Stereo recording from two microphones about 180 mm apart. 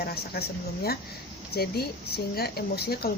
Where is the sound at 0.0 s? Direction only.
60° left (ahead or behind).